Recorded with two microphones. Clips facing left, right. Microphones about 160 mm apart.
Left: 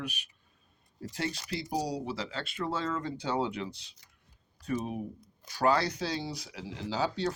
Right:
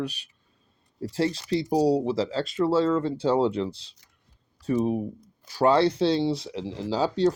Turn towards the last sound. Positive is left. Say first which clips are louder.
# right 8 dB
turn(degrees=-30)  # may be behind; listen again after turning